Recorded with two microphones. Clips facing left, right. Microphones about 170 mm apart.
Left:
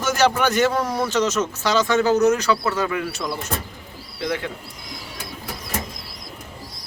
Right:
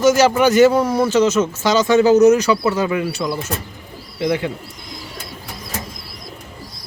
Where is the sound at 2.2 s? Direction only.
15° right (ahead or behind).